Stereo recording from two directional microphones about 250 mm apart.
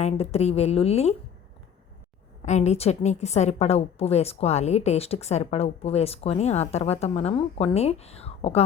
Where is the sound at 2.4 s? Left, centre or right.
Left.